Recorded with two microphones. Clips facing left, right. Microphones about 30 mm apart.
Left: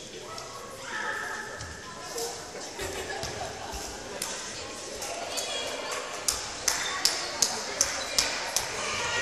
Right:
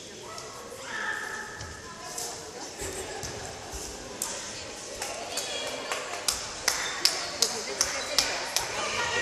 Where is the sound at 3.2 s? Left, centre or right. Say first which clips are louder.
Left 3 dB; left.